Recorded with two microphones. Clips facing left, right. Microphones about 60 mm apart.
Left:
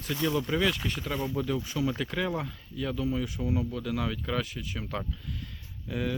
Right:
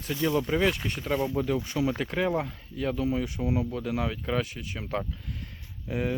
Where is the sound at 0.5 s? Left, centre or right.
Right.